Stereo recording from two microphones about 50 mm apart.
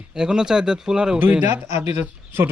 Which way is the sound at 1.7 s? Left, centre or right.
Right.